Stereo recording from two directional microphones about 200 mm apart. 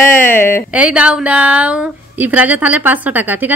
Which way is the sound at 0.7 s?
5° right (ahead or behind).